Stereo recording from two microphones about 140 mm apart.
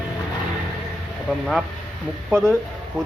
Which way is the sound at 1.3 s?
Centre (ahead or behind).